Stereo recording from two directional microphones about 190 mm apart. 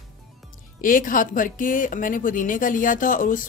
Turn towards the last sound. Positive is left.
turn(degrees=45)  # may be behind; listen again after turning